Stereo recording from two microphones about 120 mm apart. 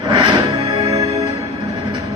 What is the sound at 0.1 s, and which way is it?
Music, 40° right (ahead or behind).